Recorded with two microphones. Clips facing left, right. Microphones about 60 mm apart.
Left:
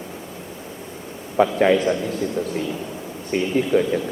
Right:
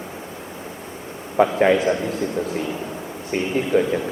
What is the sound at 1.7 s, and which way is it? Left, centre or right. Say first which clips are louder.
Speech: even; right.